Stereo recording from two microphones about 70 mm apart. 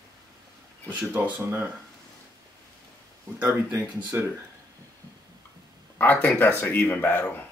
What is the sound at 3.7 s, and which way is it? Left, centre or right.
Speech, right.